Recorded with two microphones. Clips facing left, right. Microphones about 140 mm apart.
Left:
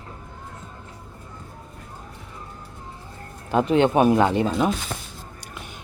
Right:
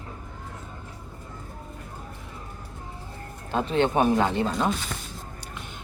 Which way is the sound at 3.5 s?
15° left (ahead or behind).